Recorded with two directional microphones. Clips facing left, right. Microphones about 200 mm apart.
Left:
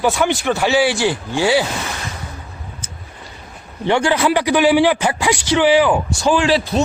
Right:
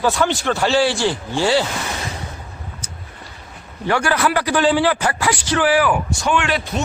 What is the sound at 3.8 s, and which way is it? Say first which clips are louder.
A man's voice: left 3 dB; 20° left (ahead or behind).